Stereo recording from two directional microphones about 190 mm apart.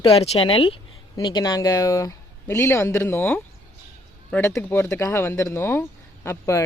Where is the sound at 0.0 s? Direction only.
30° left (ahead or behind).